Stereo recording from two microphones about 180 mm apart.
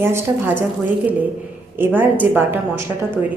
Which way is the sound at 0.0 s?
10° right (ahead or behind).